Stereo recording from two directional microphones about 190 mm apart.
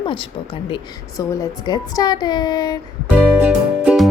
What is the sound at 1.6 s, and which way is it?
Speech, 20° left (ahead or behind).